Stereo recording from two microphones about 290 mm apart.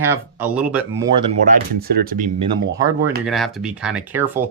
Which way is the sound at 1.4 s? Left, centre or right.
Right.